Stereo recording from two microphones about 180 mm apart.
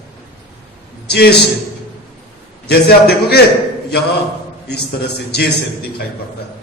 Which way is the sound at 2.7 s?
60° left (ahead or behind).